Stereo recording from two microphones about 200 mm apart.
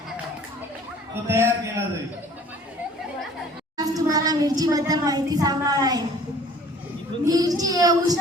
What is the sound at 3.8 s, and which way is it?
A child's voice, 20° right (ahead or behind).